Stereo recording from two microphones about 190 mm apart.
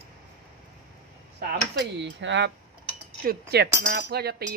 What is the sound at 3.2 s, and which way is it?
Speech, 55° right (ahead or behind).